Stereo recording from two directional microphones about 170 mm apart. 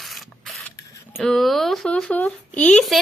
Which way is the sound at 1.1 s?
Centre (ahead or behind).